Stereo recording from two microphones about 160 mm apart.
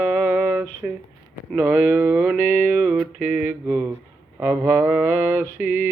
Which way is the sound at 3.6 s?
10° right (ahead or behind).